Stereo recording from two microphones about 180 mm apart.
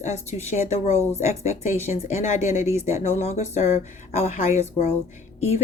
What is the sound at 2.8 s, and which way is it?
A woman's voice, 35° left (ahead or behind).